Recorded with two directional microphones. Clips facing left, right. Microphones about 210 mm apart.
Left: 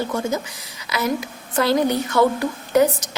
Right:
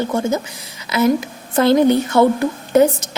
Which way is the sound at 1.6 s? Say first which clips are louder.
Right 6 dB; 25° right (ahead or behind).